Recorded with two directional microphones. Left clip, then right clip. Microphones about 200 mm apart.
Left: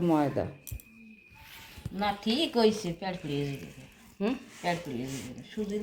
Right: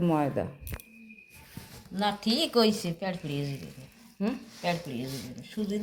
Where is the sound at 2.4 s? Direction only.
25° right (ahead or behind).